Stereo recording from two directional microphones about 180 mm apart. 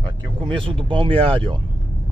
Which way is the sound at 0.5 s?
30° right (ahead or behind).